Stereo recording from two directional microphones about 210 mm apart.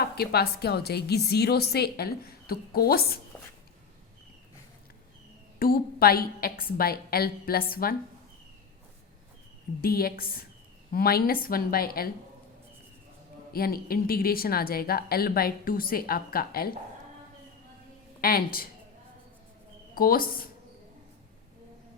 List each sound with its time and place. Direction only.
0.0 s a woman's voice: 50° left (ahead or behind)
5.5 s a woman's voice: 45° left (ahead or behind)
9.8 s a woman's voice: 45° left (ahead or behind)
13.5 s a woman's voice: 45° left (ahead or behind)
18.2 s a woman's voice: 45° left (ahead or behind)
19.9 s a woman's voice: 45° left (ahead or behind)